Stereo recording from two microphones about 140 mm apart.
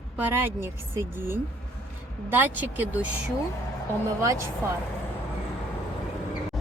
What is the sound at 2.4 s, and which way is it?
Speech, 10° right (ahead or behind).